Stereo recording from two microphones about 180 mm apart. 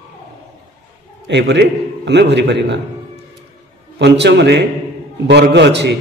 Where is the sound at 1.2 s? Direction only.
75° right (ahead or behind).